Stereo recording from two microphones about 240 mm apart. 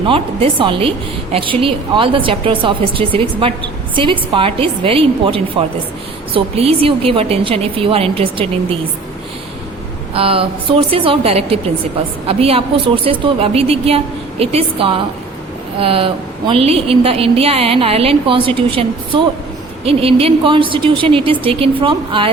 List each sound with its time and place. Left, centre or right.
0.0 s a woman's voice: right
10.2 s a woman's voice: right